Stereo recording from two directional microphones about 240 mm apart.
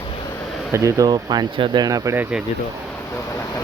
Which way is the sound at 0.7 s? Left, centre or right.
Centre.